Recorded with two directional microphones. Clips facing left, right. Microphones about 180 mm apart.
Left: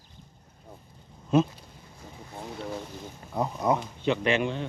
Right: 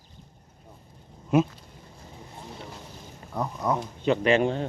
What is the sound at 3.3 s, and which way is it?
Speech, 15° left (ahead or behind).